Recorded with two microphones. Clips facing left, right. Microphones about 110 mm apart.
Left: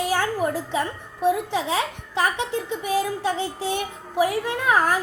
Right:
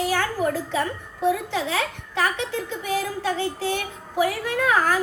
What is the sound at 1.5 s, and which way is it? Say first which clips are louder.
A child's voice: left 1 dB; 20° left (ahead or behind).